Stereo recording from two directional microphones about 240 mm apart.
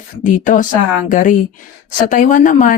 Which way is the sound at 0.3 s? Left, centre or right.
Left.